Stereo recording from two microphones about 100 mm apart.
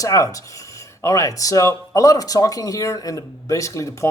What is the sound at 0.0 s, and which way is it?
Speech, 35° left (ahead or behind).